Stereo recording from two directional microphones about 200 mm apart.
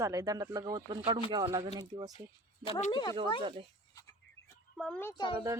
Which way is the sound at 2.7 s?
35° left (ahead or behind).